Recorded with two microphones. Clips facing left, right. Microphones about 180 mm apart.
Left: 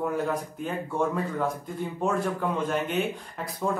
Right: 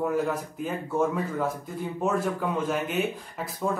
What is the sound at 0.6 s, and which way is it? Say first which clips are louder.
Speech: right 2 dB; 5° right (ahead or behind).